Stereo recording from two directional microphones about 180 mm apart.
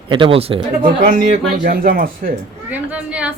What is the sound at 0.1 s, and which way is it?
Speech, 30° right (ahead or behind).